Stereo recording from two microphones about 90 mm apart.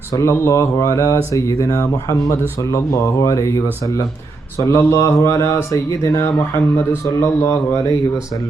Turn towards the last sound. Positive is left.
turn(degrees=30)  # may be behind; listen again after turning